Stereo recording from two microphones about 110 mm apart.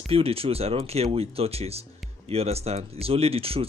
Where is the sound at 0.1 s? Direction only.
60° right (ahead or behind).